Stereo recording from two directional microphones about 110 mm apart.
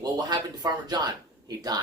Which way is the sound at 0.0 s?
40° right (ahead or behind).